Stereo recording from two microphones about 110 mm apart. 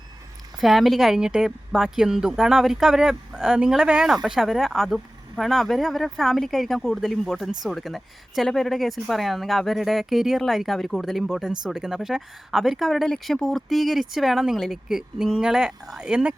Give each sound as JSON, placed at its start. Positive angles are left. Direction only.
{"t": 0.6, "sound": "speech", "side_deg": 0}